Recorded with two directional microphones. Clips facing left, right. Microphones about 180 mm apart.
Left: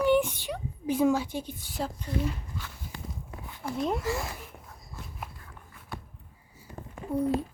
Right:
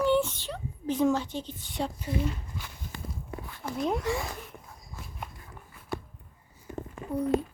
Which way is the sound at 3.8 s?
Centre (ahead or behind).